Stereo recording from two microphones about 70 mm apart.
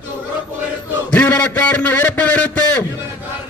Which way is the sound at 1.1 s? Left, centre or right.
Centre.